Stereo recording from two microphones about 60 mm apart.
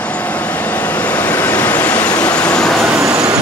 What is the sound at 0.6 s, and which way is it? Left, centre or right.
Vehicle, left.